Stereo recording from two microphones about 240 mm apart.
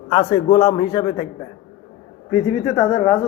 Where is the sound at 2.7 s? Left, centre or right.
Centre.